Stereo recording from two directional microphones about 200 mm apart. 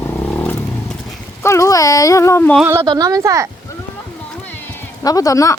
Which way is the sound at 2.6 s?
10° right (ahead or behind).